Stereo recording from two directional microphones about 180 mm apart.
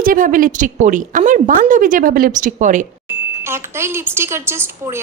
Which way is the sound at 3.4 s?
15° right (ahead or behind).